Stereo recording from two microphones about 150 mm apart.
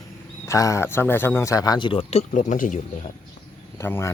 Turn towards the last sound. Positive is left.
turn(degrees=15)  # may be behind; listen again after turning